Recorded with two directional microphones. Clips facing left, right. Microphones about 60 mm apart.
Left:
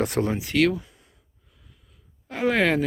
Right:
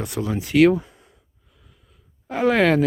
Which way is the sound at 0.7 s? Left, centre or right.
Right.